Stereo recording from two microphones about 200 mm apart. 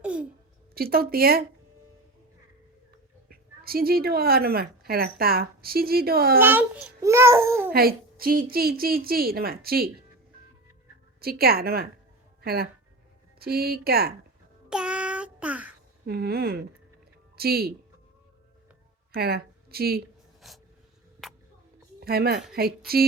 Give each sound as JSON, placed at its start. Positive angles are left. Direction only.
{"t": 0.0, "sound": "a sound", "side_deg": -5}
{"t": 0.7, "sound": "a woman's voice", "side_deg": -50}
{"t": 3.2, "sound": "a woman's voice", "side_deg": -50}
{"t": 6.4, "sound": "a child's voice", "side_deg": -10}
{"t": 7.7, "sound": "a woman's voice", "side_deg": -50}
{"t": 11.2, "sound": "a woman's voice", "side_deg": -50}
{"t": 14.7, "sound": "child singing", "side_deg": -5}
{"t": 16.0, "sound": "a woman's voice", "side_deg": -50}
{"t": 19.1, "sound": "a woman's voice", "side_deg": -50}
{"t": 20.4, "sound": "dog", "side_deg": 0}
{"t": 22.0, "sound": "a woman's voice", "side_deg": -50}